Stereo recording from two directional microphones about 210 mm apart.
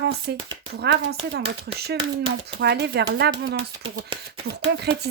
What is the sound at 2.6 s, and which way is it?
Speech, 50° right (ahead or behind).